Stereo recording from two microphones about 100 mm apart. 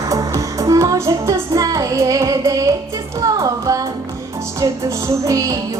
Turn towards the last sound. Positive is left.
turn(degrees=-35)  # may be behind; listen again after turning